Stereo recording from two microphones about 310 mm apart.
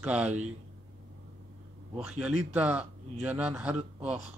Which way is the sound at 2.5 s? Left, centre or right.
Centre.